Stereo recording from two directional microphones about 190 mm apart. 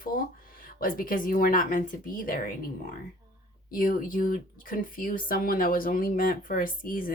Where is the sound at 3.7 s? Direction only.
45° left (ahead or behind).